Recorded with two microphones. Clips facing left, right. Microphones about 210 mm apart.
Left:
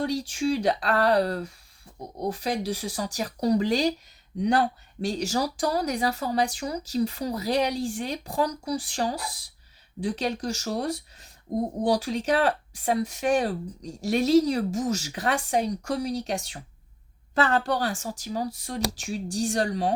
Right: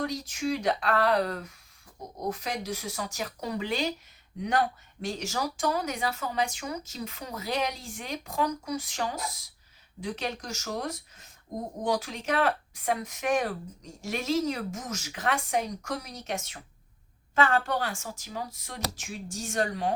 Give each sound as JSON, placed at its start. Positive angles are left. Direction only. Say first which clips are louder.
{"t": 0.0, "sound": "a woman's voice", "louder": "left 5 dB", "side_deg": 30}